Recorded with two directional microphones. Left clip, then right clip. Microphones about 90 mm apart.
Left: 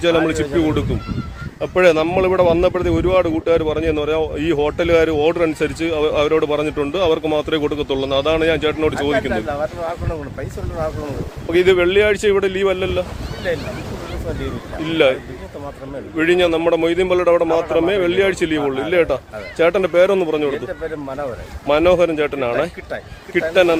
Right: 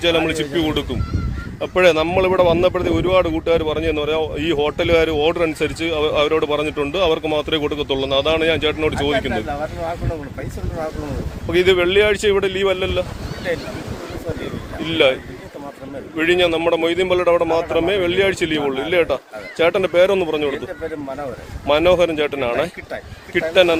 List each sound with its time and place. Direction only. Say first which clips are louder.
0.0 s speech: left 1 dB; 35° left (ahead or behind)
11.4 s speech: left 1 dB; 35° left (ahead or behind)
14.8 s speech: left 1 dB; 35° left (ahead or behind)
21.7 s speech: left 1 dB; 30° left (ahead or behind)